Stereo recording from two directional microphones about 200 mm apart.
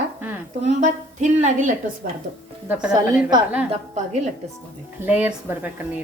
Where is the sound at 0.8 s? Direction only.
40° right (ahead or behind).